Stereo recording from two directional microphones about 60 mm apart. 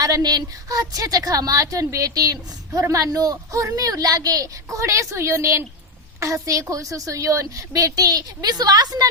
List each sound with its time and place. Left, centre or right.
0.0 s a woman's voice: right
6.1 s a woman's voice: right